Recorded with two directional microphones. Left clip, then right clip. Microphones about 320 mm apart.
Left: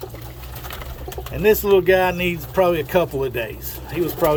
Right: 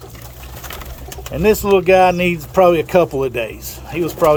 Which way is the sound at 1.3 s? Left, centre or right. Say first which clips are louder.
Right 2 dB; centre.